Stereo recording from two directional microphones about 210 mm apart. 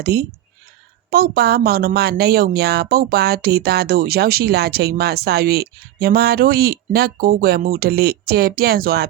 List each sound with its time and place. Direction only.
0.0 s a woman's voice: 50° right (ahead or behind)